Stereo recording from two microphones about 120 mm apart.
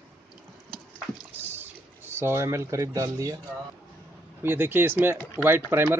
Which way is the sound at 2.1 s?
20° right (ahead or behind).